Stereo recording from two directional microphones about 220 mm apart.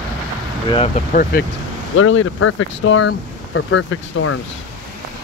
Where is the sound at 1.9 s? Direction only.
65° left (ahead or behind).